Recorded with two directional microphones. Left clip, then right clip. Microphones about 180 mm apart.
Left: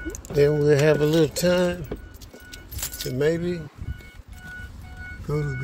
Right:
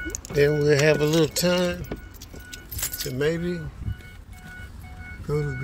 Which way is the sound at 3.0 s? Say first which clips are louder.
Left 2 dB; 50° left (ahead or behind).